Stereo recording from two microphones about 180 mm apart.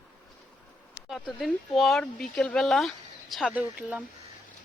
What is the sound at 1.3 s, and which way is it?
Speech, centre (ahead or behind).